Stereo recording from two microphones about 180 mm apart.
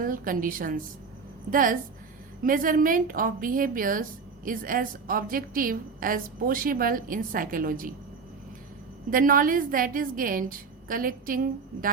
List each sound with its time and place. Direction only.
0.0 s a woman's voice: 50° right (ahead or behind)
9.0 s a woman's voice: 50° right (ahead or behind)